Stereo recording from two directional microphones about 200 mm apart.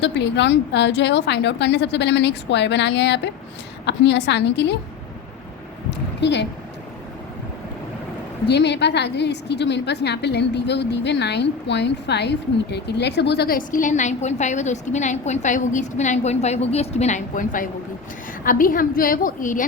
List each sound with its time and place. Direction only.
0.0 s a woman's voice: 60° left (ahead or behind)
5.9 s a sound: 60° left (ahead or behind)
8.4 s a woman's voice: 60° left (ahead or behind); by 19.6 s 40° left (ahead or behind)